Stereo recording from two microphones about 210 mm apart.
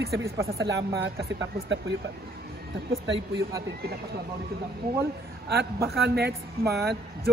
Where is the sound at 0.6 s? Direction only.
55° right (ahead or behind).